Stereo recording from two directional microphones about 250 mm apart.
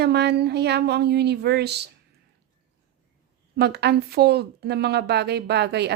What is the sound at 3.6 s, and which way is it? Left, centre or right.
A woman's voice, right.